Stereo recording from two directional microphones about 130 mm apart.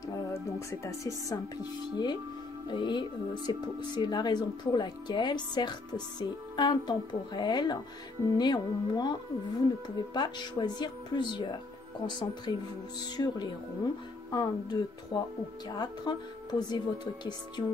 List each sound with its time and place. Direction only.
0.3 s speech: 25° left (ahead or behind)
2.7 s speech: 35° left (ahead or behind)